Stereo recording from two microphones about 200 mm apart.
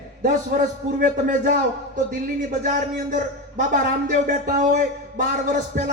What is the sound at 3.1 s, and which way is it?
A man's voice, 40° right (ahead or behind).